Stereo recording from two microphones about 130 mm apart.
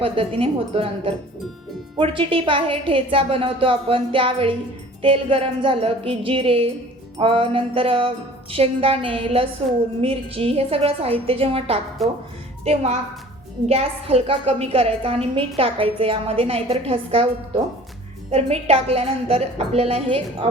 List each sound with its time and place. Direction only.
0.0 s a woman's voice: 45° right (ahead or behind)
12.0 s speech: centre (ahead or behind)
12.6 s a woman's voice: 55° right (ahead or behind)